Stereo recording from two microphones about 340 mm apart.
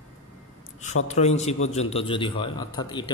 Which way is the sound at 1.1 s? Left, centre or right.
Centre.